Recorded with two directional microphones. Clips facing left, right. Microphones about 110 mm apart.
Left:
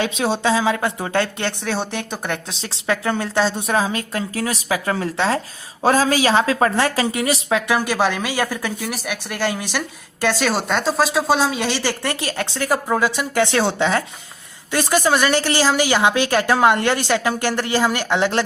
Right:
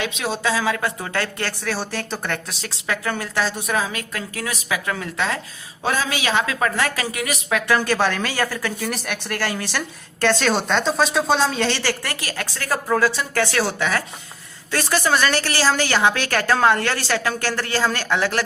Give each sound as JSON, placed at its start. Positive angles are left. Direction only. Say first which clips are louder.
{"t": 0.0, "sound": "a woman's voice", "louder": "left 4 dB", "side_deg": 35}
{"t": 7.7, "sound": "speech", "louder": "right 2 dB", "side_deg": 15}